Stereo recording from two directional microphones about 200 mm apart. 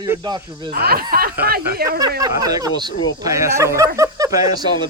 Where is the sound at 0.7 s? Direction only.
50° right (ahead or behind).